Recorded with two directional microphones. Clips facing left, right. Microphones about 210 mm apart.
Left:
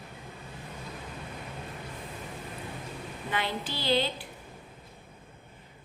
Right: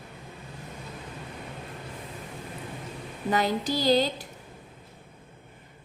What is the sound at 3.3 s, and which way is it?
Speech, 40° right (ahead or behind).